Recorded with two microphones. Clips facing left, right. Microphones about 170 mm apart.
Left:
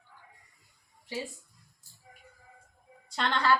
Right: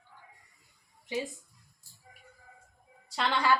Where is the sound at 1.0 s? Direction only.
20° right (ahead or behind).